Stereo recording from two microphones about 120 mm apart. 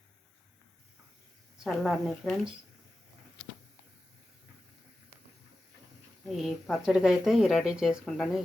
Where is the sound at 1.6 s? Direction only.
Centre (ahead or behind).